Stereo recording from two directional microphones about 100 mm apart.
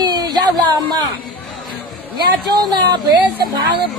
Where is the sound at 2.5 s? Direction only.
45° right (ahead or behind).